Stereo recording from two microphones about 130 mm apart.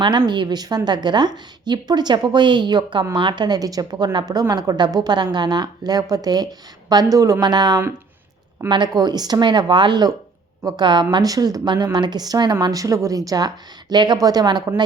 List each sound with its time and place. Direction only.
0.0 s a woman's voice: 35° right (ahead or behind)